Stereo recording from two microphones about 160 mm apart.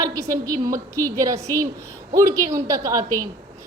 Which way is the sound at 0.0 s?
20° right (ahead or behind).